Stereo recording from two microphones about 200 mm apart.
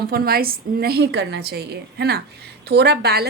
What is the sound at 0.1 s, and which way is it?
A woman's voice, 50° right (ahead or behind).